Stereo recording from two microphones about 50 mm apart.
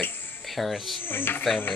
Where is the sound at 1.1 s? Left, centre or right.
Left.